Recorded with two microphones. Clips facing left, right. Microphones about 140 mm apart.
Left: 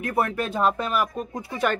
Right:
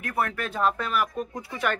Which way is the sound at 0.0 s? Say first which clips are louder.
Left 4 dB; 20° left (ahead or behind).